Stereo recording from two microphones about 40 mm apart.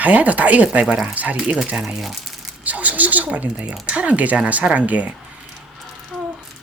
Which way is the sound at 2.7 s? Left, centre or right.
Right.